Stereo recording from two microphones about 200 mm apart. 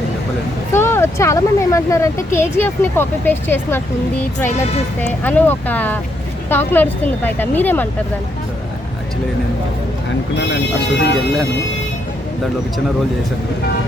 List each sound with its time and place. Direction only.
0.7 s speech: 10° left (ahead or behind)
5.2 s speech: 10° left (ahead or behind)
10.3 s speech: 60° left (ahead or behind)